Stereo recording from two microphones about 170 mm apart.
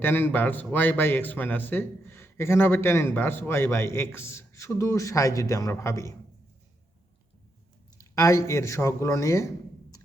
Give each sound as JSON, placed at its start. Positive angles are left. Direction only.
{"t": 0.0, "sound": "a man's voice", "side_deg": 10}
{"t": 7.9, "sound": "a man's voice", "side_deg": 20}